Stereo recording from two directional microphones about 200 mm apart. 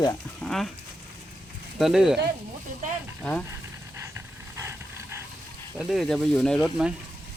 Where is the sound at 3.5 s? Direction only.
15° right (ahead or behind).